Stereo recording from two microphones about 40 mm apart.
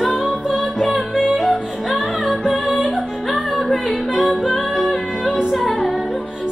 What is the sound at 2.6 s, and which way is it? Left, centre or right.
Music, left.